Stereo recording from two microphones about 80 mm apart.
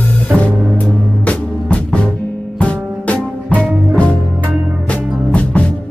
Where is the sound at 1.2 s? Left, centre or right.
Centre.